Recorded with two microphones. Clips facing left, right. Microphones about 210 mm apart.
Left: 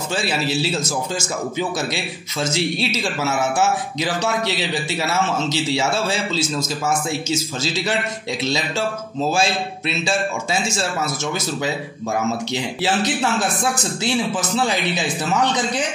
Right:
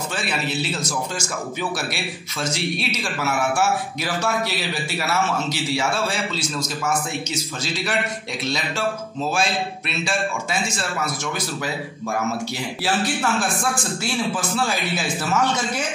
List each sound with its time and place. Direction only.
0.1 s a man's voice: 30° left (ahead or behind)